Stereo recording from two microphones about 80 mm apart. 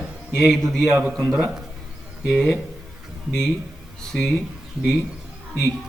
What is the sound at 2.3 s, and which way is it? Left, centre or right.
Speech, centre.